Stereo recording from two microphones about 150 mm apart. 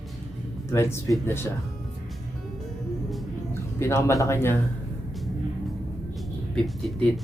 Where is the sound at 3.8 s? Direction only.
15° left (ahead or behind).